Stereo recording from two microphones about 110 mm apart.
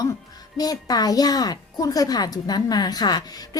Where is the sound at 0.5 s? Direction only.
35° left (ahead or behind).